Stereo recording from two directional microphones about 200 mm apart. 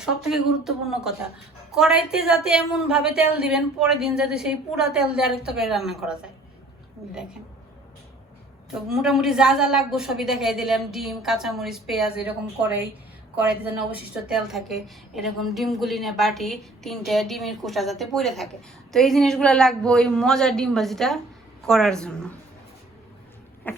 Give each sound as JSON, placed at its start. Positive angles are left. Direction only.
{"t": 0.0, "sound": "a woman's voice", "side_deg": 0}
{"t": 8.9, "sound": "a woman's voice", "side_deg": 0}
{"t": 13.9, "sound": "a woman's voice", "side_deg": -5}
{"t": 23.6, "sound": "insect", "side_deg": 10}